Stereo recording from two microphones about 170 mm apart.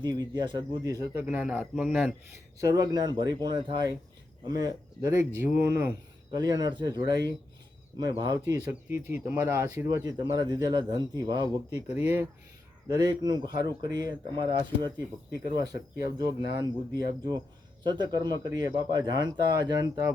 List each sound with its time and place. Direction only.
0.0 s speech: 25° right (ahead or behind)
1.2 s speech: 10° right (ahead or behind)
2.6 s speech: 20° right (ahead or behind)
6.3 s speech: 25° right (ahead or behind)
8.9 s speech: 15° right (ahead or behind)
11.9 s speech: 10° right (ahead or behind)
12.9 s speech: 25° right (ahead or behind)